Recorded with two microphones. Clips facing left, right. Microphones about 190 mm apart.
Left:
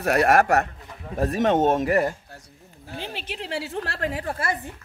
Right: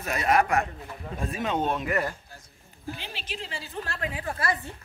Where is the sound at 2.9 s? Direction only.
50° left (ahead or behind); by 4.0 s 75° left (ahead or behind).